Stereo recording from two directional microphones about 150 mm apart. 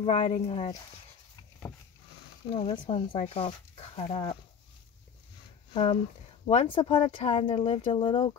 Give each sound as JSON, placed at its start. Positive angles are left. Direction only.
{"t": 0.0, "sound": "speech", "side_deg": 40}
{"t": 2.5, "sound": "speech", "side_deg": 35}
{"t": 5.7, "sound": "speech", "side_deg": 35}